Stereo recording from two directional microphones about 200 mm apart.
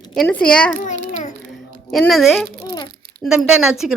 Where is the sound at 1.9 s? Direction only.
Centre (ahead or behind).